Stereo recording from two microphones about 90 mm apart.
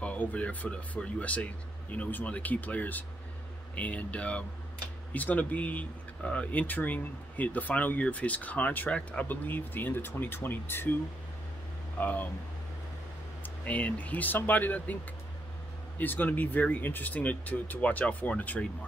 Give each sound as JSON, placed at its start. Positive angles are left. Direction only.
{"t": 0.0, "sound": "speech", "side_deg": 15}
{"t": 12.0, "sound": "speech", "side_deg": 20}
{"t": 13.4, "sound": "speech", "side_deg": 15}
{"t": 16.0, "sound": "speech", "side_deg": 20}